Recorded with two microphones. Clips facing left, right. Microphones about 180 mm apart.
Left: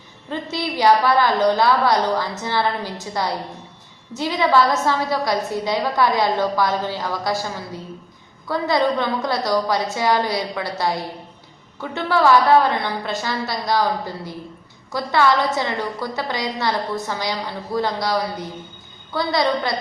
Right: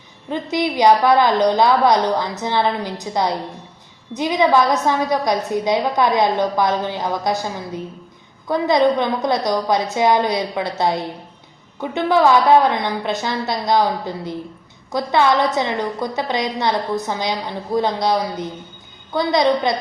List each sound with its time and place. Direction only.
0.3 s a woman's voice: 20° right (ahead or behind)